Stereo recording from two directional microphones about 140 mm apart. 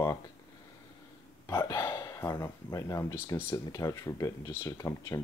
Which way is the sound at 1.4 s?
20° left (ahead or behind).